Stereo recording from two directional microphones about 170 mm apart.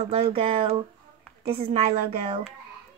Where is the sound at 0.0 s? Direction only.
35° right (ahead or behind).